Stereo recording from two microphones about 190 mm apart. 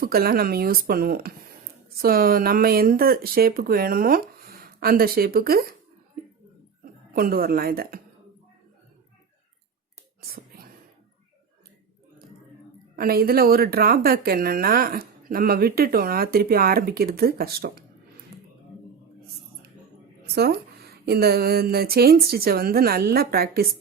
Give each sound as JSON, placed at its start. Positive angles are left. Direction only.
{"t": 0.0, "sound": "speech", "side_deg": -50}
{"t": 7.1, "sound": "speech", "side_deg": -50}
{"t": 10.2, "sound": "whispering", "side_deg": -50}
{"t": 13.0, "sound": "speech", "side_deg": -50}
{"t": 20.2, "sound": "a woman's voice", "side_deg": -55}